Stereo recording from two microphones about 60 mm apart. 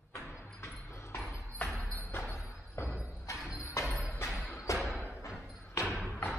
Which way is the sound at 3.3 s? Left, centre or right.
Centre.